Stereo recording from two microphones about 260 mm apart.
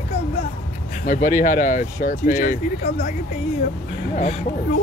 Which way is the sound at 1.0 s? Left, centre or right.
Left.